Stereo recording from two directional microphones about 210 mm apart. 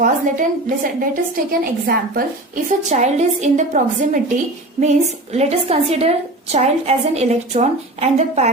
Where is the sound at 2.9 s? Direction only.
35° right (ahead or behind).